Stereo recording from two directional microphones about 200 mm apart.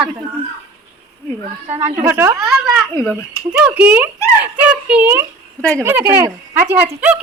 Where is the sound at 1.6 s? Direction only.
35° right (ahead or behind).